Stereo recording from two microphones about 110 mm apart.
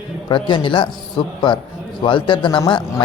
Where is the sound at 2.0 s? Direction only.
50° left (ahead or behind).